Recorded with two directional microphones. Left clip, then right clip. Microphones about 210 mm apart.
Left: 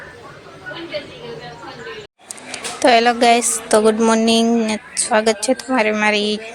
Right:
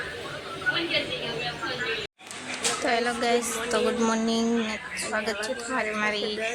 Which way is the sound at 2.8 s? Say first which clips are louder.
Left 15 dB; 35° left (ahead or behind).